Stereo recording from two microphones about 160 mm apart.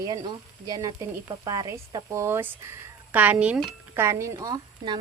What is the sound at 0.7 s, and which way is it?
Speech, 20° right (ahead or behind).